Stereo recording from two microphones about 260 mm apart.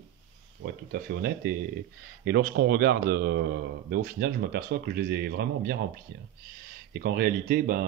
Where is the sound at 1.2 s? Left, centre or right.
Right.